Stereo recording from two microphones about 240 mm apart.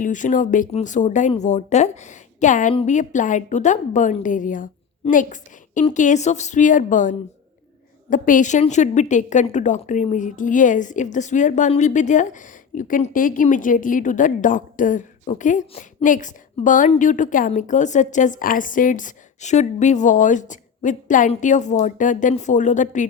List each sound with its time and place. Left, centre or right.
0.0 s a woman's voice: left